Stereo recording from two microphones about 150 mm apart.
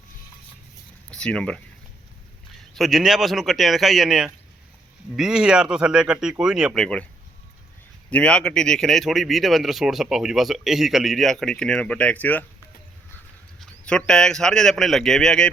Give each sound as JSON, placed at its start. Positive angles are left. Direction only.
{"t": 1.1, "sound": "speech", "side_deg": 5}
{"t": 2.7, "sound": "speech", "side_deg": 0}
{"t": 8.1, "sound": "speech", "side_deg": 10}
{"t": 13.6, "sound": "speech", "side_deg": 5}